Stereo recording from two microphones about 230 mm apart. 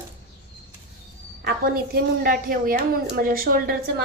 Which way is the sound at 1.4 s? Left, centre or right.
Right.